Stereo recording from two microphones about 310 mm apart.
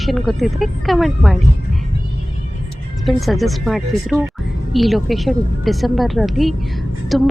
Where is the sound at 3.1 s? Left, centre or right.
Centre.